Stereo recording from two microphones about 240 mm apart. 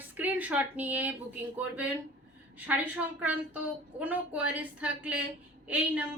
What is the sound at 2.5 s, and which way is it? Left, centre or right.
A woman's voice, centre.